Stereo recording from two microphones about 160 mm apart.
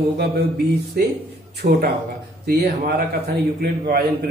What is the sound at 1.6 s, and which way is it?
Speech, 55° right (ahead or behind).